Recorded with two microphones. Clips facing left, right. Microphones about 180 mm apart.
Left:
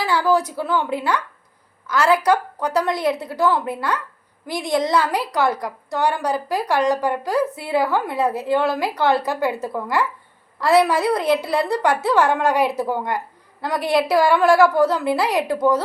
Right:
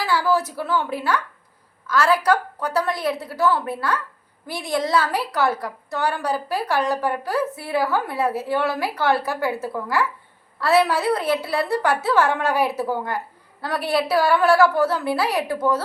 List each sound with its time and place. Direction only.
0.0 s a woman's voice: 15° left (ahead or behind)